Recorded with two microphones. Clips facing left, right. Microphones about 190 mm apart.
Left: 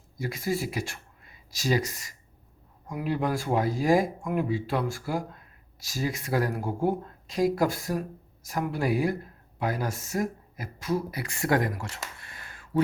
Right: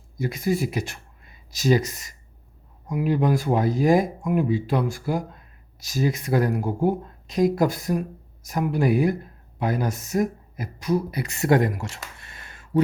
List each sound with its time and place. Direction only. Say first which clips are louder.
0.2 s speech: right 5 dB; 20° right (ahead or behind)